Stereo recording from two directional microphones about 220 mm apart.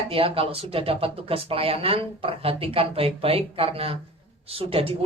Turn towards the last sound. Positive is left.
turn(degrees=-25)  # may be behind; listen again after turning